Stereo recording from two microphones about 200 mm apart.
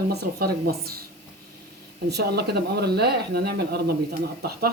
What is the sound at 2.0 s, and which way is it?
Speech, 55° right (ahead or behind).